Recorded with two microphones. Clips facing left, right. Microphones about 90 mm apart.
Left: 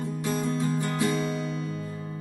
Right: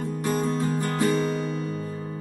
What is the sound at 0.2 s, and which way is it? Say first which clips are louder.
Music: right 3 dB; 50° right (ahead or behind).